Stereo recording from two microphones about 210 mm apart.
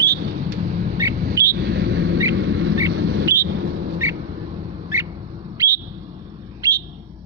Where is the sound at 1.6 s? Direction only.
55° right (ahead or behind).